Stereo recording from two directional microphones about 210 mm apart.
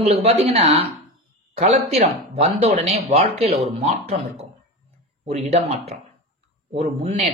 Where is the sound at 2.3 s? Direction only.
30° right (ahead or behind).